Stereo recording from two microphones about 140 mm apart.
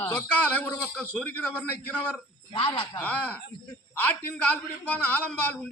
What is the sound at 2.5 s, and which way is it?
Speech, 40° left (ahead or behind).